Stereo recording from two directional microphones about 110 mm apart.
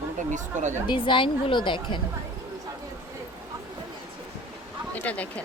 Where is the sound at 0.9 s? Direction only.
50° left (ahead or behind).